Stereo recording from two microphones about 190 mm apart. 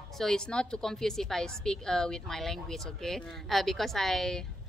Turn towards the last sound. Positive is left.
turn(degrees=0)  # may be behind; listen again after turning